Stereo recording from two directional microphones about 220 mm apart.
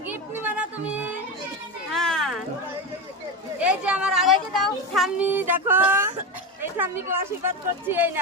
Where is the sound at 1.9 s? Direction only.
Centre (ahead or behind).